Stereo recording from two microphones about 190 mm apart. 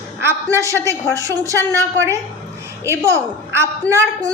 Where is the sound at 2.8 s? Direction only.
15° right (ahead or behind).